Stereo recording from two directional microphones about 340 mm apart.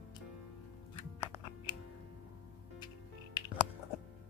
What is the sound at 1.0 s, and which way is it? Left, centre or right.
Music, centre.